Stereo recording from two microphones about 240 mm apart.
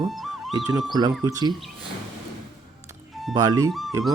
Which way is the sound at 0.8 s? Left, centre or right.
Centre.